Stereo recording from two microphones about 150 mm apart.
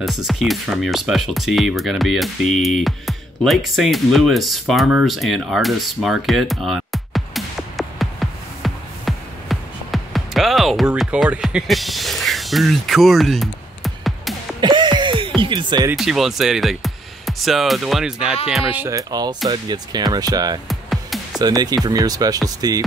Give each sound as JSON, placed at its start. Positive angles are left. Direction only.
{"t": 0.0, "sound": "speech", "side_deg": 0}
{"t": 14.6, "sound": "a sound", "side_deg": -30}
{"t": 15.4, "sound": "speech", "side_deg": -30}
{"t": 16.0, "sound": "speech", "side_deg": 0}
{"t": 18.9, "sound": "speech", "side_deg": -25}
{"t": 20.6, "sound": "music", "side_deg": 0}
{"t": 21.4, "sound": "speech", "side_deg": -25}